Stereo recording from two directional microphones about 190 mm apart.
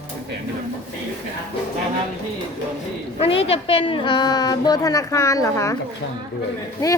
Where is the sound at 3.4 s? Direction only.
30° left (ahead or behind).